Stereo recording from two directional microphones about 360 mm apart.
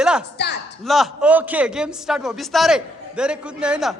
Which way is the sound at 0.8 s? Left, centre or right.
Centre.